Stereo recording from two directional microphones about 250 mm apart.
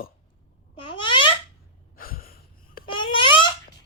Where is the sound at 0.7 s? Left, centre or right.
Left.